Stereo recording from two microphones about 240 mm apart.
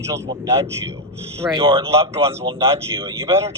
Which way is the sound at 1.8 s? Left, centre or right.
Centre.